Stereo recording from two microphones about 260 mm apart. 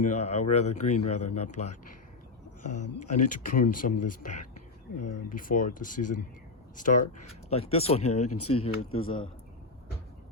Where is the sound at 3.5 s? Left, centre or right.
Left.